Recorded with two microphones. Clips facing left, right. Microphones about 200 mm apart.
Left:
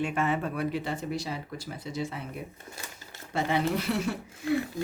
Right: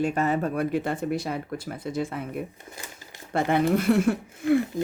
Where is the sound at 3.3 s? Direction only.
55° right (ahead or behind).